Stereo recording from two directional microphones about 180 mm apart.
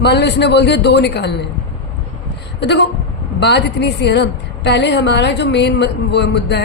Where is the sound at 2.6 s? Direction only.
70° left (ahead or behind).